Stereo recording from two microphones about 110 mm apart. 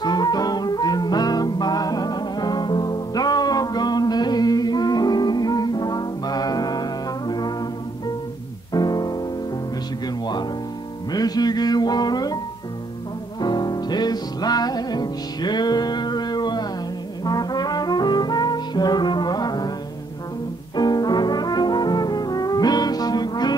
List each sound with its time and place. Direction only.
0.0 s music: 40° left (ahead or behind)
8.7 s music: 35° left (ahead or behind)
13.4 s music: 40° left (ahead or behind)
20.7 s brass instrument: 40° left (ahead or behind)